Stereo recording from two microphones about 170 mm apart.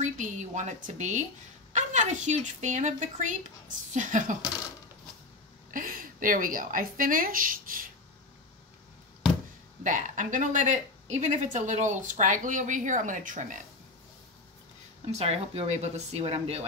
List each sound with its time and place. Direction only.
0.0 s a woman's voice: 45° right (ahead or behind)
5.7 s a woman's voice: 55° right (ahead or behind)
9.8 s a woman's voice: 50° right (ahead or behind)
15.0 s speech: 35° right (ahead or behind)